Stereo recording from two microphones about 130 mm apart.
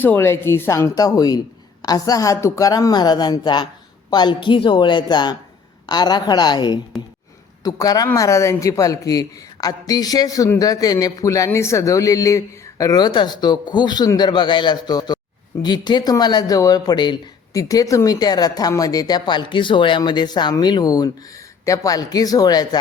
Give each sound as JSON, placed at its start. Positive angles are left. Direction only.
{"t": 0.0, "sound": "a man's voice", "side_deg": 15}